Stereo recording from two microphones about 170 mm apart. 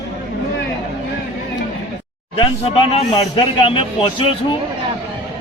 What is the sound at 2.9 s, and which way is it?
Speech, 35° left (ahead or behind).